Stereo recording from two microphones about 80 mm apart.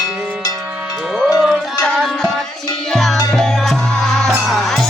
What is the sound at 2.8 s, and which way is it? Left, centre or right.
Music, centre.